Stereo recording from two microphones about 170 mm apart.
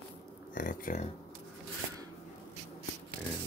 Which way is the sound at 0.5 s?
50° left (ahead or behind).